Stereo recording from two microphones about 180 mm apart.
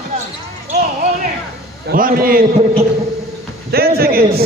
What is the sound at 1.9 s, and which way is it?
Speech, 50° right (ahead or behind).